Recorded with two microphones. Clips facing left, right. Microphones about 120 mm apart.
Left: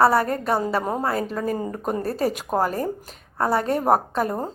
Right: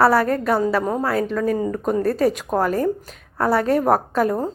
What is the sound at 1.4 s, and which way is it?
Speech, 25° left (ahead or behind).